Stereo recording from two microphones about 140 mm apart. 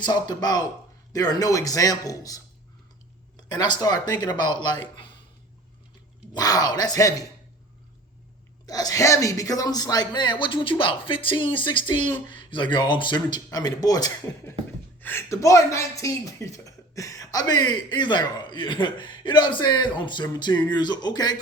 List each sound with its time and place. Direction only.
0.0 s a man's voice: 30° left (ahead or behind)
6.3 s a man's voice: 25° left (ahead or behind)
8.6 s speech: 25° left (ahead or behind)